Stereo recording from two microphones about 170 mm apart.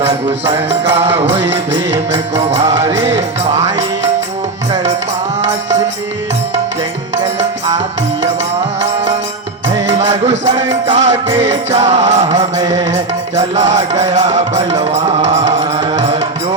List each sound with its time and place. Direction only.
0.0 s music: 35° right (ahead or behind)
2.8 s music: 15° right (ahead or behind)
10.1 s music: 40° right (ahead or behind)
12.4 s music: 20° right (ahead or behind)
13.3 s music: 45° right (ahead or behind)
15.2 s music: 40° right (ahead or behind)